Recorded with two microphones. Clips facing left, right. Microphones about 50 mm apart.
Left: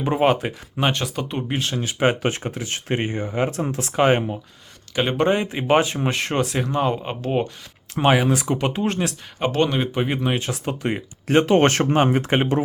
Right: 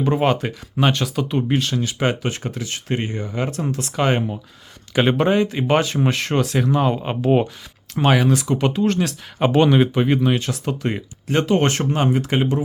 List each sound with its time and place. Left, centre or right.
0.0 s speech: centre
5.1 s speech: centre
5.5 s speech: centre
6.9 s speech: centre
7.9 s speech: centre
8.7 s speech: left
9.4 s speech: centre
11.4 s speech: left